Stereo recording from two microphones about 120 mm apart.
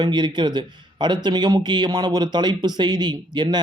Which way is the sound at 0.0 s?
40° right (ahead or behind).